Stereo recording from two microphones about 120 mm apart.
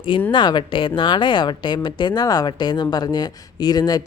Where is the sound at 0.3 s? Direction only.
40° left (ahead or behind).